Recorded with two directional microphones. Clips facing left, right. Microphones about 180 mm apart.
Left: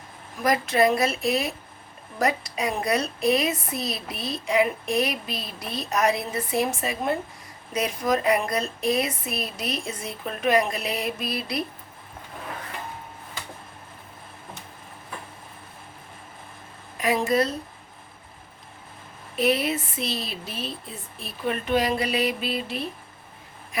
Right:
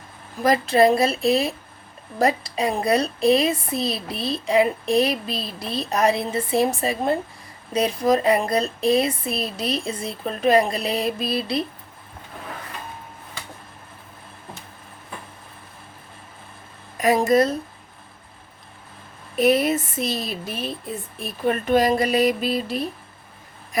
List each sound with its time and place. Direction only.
0.4 s a woman's voice: 30° right (ahead or behind)
17.0 s speech: 45° right (ahead or behind)
19.4 s speech: 45° right (ahead or behind)